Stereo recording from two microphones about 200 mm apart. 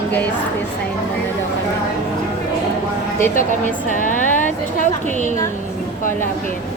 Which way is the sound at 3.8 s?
40° left (ahead or behind).